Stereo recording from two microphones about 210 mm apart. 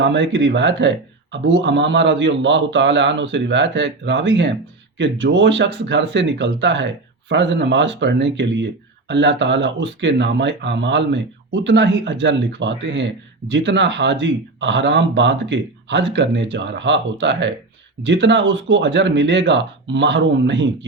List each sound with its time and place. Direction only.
0.0 s speech: 60° right (ahead or behind)